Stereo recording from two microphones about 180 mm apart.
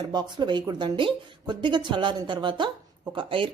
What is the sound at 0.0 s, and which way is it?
Speech, 25° right (ahead or behind).